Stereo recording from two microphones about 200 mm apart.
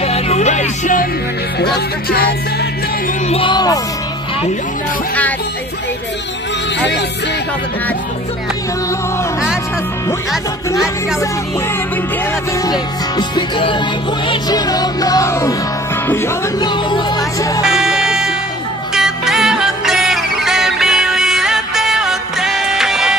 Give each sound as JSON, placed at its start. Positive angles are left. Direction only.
{"t": 0.0, "sound": "music", "side_deg": 30}
{"t": 1.6, "sound": "music", "side_deg": 50}
{"t": 3.3, "sound": "music", "side_deg": 25}
{"t": 13.3, "sound": "music", "side_deg": 25}
{"t": 17.6, "sound": "music", "side_deg": -5}